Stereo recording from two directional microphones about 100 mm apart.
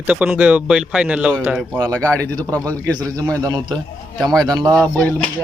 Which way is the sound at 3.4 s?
40° right (ahead or behind).